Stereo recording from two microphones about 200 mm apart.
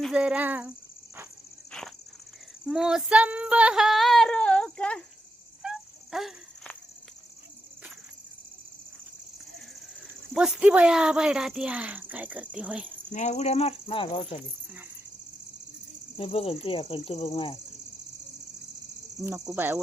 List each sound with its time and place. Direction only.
0.0 s speech: 5° right (ahead or behind)
2.6 s female singing: 5° right (ahead or behind)
5.6 s a sound: centre (ahead or behind)
10.3 s speech: 5° right (ahead or behind)
13.1 s speech: 35° left (ahead or behind)
16.1 s speech: 30° left (ahead or behind)
19.5 s speech: 10° right (ahead or behind)